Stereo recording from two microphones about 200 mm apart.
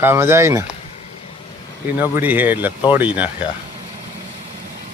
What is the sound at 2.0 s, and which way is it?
Speech, 10° right (ahead or behind).